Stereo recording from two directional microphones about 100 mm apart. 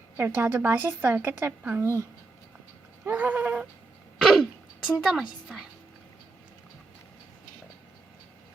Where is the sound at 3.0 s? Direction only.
15° right (ahead or behind).